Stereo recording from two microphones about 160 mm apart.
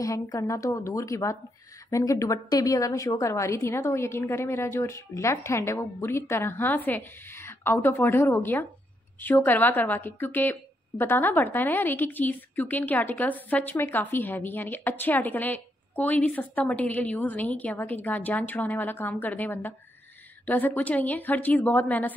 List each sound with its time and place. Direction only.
0.0 s a woman's voice: 20° left (ahead or behind)